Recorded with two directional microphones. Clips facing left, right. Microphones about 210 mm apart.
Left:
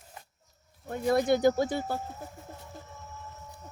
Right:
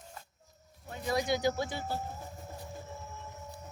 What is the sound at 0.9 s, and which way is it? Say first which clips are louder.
Speech: left 7 dB; 50° left (ahead or behind).